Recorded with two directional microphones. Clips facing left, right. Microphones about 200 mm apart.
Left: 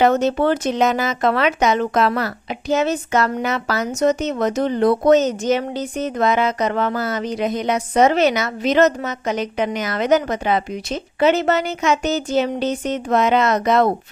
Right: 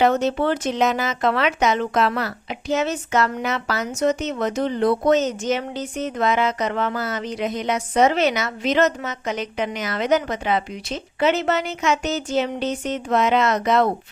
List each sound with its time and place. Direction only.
0.0 s speech: 45° left (ahead or behind)